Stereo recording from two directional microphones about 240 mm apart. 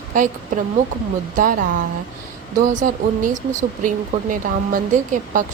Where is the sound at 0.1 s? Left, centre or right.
Right.